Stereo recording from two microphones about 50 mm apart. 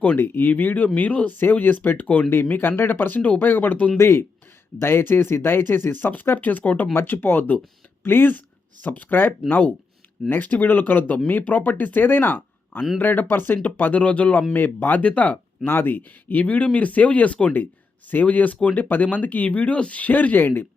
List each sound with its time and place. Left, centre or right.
0.2 s speech: left
2.3 s speech: left
3.9 s speech: left
6.9 s speech: left
15.0 s speech: left
15.6 s speech: left